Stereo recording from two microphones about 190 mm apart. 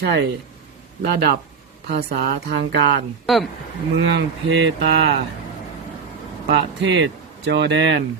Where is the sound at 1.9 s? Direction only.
50° right (ahead or behind).